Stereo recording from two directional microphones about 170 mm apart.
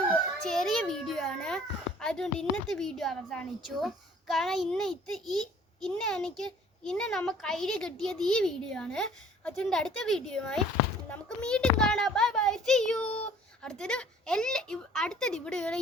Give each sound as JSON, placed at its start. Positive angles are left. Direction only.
{"t": 0.4, "sound": "a child's voice", "side_deg": 0}